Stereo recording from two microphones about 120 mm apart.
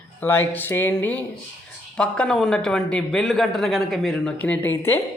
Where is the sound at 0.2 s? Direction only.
15° left (ahead or behind).